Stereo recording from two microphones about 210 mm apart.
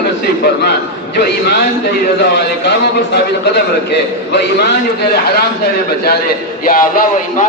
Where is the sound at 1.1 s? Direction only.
50° left (ahead or behind).